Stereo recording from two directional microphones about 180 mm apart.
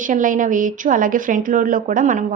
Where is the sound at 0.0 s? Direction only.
45° right (ahead or behind).